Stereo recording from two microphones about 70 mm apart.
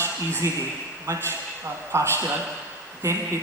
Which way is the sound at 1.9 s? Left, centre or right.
Right.